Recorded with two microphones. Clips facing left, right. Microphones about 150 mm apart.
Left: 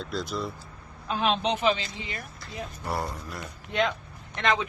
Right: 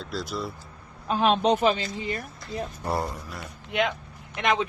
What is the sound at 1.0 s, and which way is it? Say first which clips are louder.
A man's voice: right 5 dB; 45° right (ahead or behind).